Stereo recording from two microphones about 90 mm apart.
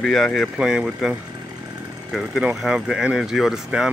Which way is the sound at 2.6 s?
5° right (ahead or behind).